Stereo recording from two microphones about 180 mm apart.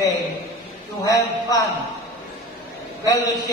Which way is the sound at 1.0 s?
20° left (ahead or behind).